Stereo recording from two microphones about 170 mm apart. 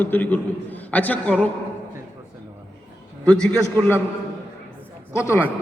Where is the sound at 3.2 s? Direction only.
5° left (ahead or behind).